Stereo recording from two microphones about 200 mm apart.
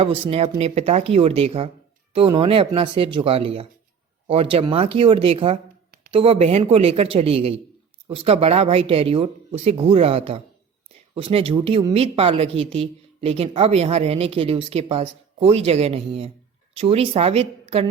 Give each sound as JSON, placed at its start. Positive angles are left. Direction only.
{"t": 0.0, "sound": "speech", "side_deg": -30}